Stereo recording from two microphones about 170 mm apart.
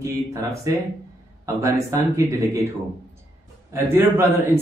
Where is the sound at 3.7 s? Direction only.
15° right (ahead or behind).